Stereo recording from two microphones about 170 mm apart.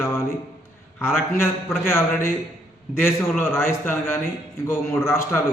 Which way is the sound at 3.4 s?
15° left (ahead or behind).